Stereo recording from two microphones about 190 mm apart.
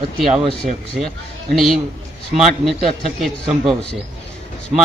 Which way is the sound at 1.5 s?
Centre (ahead or behind).